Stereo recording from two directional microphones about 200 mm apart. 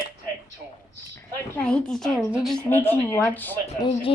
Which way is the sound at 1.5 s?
5° left (ahead or behind).